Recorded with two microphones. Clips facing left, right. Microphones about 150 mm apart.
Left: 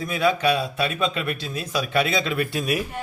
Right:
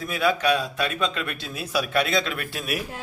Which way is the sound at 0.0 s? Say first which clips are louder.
Left 2 dB; centre (ahead or behind).